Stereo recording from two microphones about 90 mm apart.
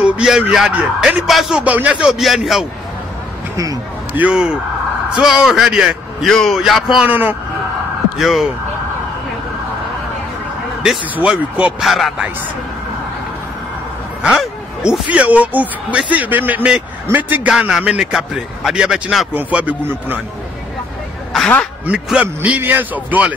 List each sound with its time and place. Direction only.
0.0 s a man's voice: 5° right (ahead or behind)
1.6 s a man's voice: 15° right (ahead or behind)
3.5 s speech: 40° right (ahead or behind)
4.1 s a man's voice: 15° right (ahead or behind)
7.1 s speech: 20° right (ahead or behind)
8.2 s a man's voice: centre (ahead or behind)
11.1 s a man's voice: 15° right (ahead or behind)
11.8 s a man's voice: centre (ahead or behind)
14.2 s a man's voice: 10° right (ahead or behind)
19.3 s a man's voice: 15° right (ahead or behind)
21.8 s a man's voice: 15° right (ahead or behind)